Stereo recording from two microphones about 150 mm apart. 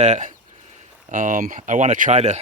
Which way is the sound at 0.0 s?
50° right (ahead or behind).